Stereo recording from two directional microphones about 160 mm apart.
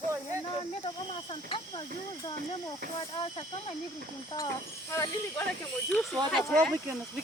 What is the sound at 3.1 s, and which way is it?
Speech, 35° left (ahead or behind).